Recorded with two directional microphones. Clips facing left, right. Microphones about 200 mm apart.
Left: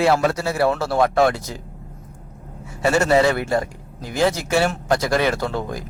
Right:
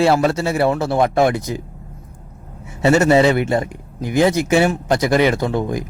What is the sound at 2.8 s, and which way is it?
A man's voice, 20° right (ahead or behind).